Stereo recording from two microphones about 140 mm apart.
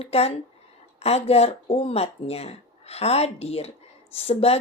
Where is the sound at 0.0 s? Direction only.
45° left (ahead or behind).